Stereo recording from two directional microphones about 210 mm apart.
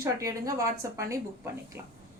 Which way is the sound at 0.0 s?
15° right (ahead or behind).